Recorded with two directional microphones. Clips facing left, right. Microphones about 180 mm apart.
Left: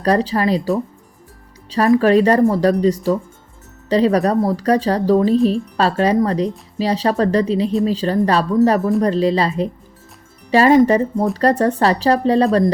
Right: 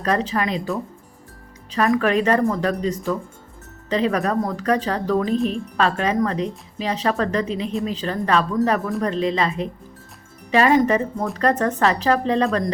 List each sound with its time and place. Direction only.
0.0 s speech: 35° left (ahead or behind)
2.0 s speech: 35° left (ahead or behind)